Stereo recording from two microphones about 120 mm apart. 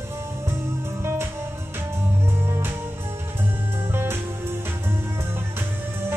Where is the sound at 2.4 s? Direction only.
20° right (ahead or behind).